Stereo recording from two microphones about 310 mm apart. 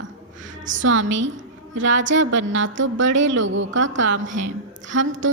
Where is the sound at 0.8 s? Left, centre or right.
Right.